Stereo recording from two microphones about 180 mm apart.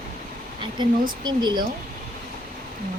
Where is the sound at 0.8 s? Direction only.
25° right (ahead or behind).